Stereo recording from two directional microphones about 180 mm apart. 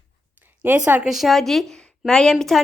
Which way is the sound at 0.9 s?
5° right (ahead or behind).